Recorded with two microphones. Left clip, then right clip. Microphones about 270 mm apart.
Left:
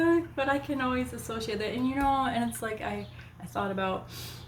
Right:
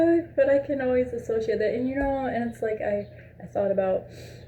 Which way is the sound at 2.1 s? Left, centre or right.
Centre.